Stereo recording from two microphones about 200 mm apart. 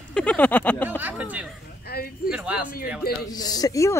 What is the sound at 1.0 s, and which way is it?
Speech, 10° right (ahead or behind).